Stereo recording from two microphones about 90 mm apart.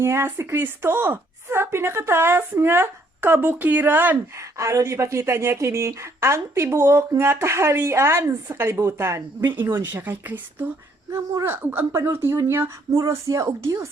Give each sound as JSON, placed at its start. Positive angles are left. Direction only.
{"t": 0.0, "sound": "a woman's voice", "side_deg": -30}
{"t": 4.4, "sound": "a woman's voice", "side_deg": -35}